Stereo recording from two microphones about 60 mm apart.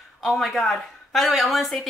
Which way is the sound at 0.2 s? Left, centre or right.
Centre.